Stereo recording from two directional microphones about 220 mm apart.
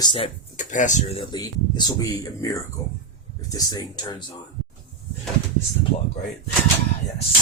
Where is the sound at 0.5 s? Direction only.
35° left (ahead or behind).